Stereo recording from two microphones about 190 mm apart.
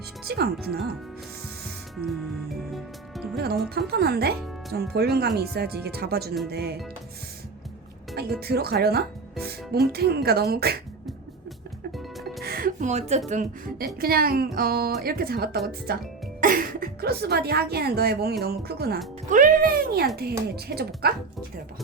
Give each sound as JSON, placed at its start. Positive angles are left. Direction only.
{"t": 0.3, "sound": "a woman's voice", "side_deg": -55}
{"t": 3.3, "sound": "a woman's voice", "side_deg": -55}
{"t": 8.1, "sound": "a woman's voice", "side_deg": -55}
{"t": 11.9, "sound": "music", "side_deg": 0}
{"t": 12.4, "sound": "speech", "side_deg": -55}
{"t": 13.8, "sound": "a woman's voice", "side_deg": -50}